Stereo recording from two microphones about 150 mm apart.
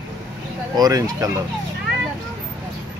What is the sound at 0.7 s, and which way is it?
Speech, 25° right (ahead or behind).